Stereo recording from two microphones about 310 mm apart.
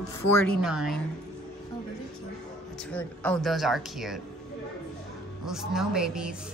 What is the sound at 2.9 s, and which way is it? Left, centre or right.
Speech, centre.